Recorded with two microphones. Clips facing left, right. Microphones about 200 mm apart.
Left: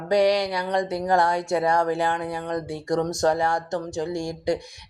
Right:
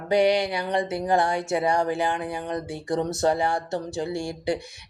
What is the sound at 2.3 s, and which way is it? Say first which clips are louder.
Speech: left 2 dB; 20° right (ahead or behind).